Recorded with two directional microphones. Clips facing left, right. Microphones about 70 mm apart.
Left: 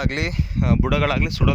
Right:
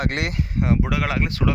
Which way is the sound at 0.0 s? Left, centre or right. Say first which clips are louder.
Even; right.